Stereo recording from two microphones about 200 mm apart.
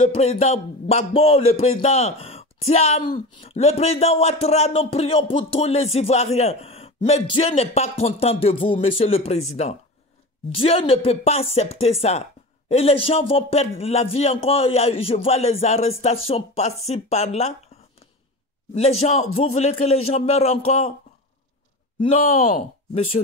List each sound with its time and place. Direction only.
0.0 s a man's voice: 35° left (ahead or behind)
18.8 s a man's voice: 30° left (ahead or behind)
22.0 s a man's voice: 30° left (ahead or behind)